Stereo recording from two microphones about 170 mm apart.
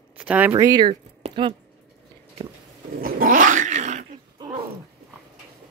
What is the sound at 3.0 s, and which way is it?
Dog, 55° right (ahead or behind).